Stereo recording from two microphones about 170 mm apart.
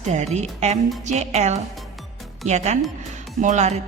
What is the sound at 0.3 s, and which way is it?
Music, 40° right (ahead or behind).